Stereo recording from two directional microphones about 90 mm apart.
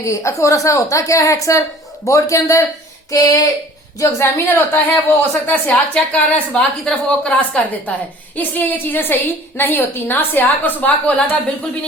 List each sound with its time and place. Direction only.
0.0 s a woman's voice: 35° left (ahead or behind); by 7.3 s 5° left (ahead or behind)
7.3 s a woman's voice: 15° left (ahead or behind)